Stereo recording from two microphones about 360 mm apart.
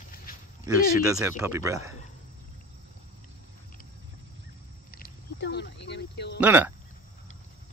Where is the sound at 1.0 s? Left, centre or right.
Centre.